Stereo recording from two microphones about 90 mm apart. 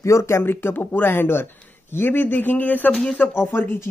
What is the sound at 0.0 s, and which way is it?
Speech, 35° left (ahead or behind).